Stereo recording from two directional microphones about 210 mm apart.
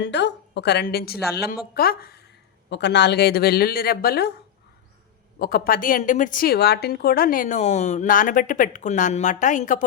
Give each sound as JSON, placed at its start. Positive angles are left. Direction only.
{"t": 0.0, "sound": "a woman's voice", "side_deg": 55}
{"t": 5.4, "sound": "a woman's voice", "side_deg": 45}